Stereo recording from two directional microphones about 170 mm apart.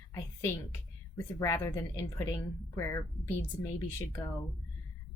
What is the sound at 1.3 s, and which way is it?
Speech, 20° left (ahead or behind).